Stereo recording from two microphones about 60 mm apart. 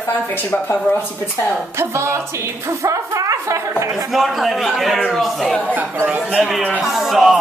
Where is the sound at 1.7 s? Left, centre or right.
Right.